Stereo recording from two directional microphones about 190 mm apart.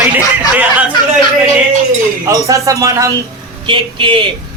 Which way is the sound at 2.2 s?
15° right (ahead or behind).